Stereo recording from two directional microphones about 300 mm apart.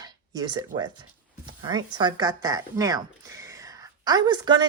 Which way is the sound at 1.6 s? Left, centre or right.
Centre.